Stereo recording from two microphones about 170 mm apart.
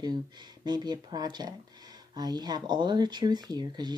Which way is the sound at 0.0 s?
25° right (ahead or behind).